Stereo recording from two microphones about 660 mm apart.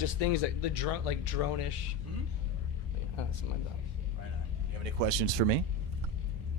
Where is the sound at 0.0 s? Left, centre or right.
Left.